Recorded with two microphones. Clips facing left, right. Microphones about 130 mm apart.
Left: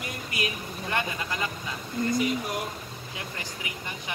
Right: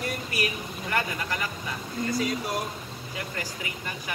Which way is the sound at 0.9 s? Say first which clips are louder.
Right 1 dB; 20° left (ahead or behind).